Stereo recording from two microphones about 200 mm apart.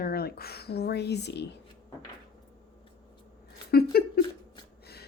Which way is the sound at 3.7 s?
50° left (ahead or behind).